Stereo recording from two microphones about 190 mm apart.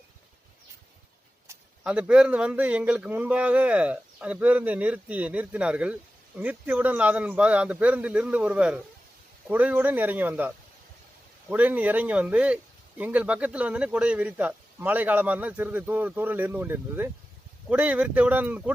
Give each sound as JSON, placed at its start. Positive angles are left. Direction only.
{"t": 1.5, "sound": "speech", "side_deg": -5}